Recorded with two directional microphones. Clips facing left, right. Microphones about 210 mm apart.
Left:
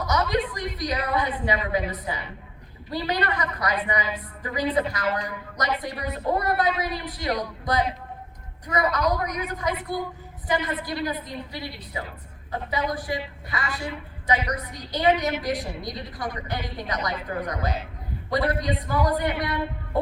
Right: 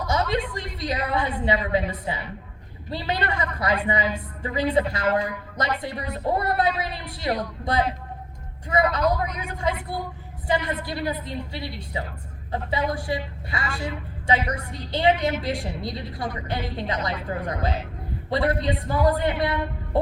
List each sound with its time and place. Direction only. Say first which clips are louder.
0.1 s a sound: even; 25° right (ahead or behind)
1.5 s a woman's voice: right 2 dB; 25° right (ahead or behind)
10.8 s a woman's voice: right 1 dB; 25° right (ahead or behind)